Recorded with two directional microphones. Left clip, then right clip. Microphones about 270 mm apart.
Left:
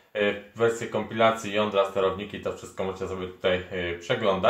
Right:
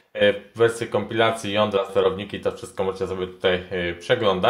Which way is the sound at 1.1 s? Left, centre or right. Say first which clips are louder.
Even; right.